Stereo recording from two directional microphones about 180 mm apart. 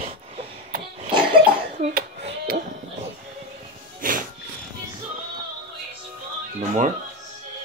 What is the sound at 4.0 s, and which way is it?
Music, 50° right (ahead or behind).